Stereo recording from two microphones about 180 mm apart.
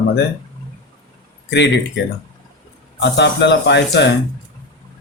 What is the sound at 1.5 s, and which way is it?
Speech, 75° left (ahead or behind).